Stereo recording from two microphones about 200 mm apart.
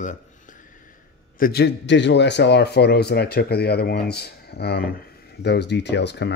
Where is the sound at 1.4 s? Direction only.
50° left (ahead or behind).